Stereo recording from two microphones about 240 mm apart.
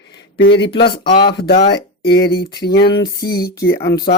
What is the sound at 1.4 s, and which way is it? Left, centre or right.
Speech, left.